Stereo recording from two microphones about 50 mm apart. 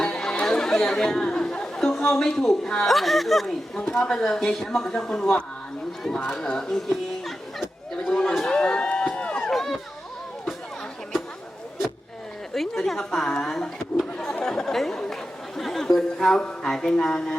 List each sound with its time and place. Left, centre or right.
0.0 s chatter: centre
2.0 s a woman's voice: centre
3.8 s a woman's voice: centre
6.4 s a woman's voice: centre
8.0 s a sound: centre
8.4 s a sound: centre
9.5 s a sound: centre
12.5 s a sound: centre
13.4 s a woman's voice: centre
14.4 s chatter: centre
16.1 s music: centre
16.4 s a woman's voice: centre